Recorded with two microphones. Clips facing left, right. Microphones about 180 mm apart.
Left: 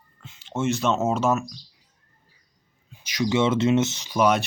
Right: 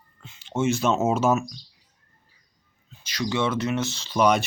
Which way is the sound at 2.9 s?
15° left (ahead or behind).